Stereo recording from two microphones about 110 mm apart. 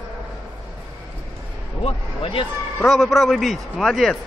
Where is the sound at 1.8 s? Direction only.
55° left (ahead or behind).